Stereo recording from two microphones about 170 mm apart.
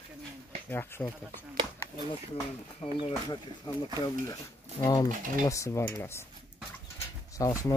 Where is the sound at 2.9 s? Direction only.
25° left (ahead or behind).